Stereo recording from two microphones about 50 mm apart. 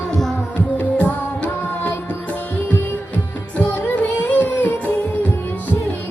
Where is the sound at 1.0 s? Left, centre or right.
Left.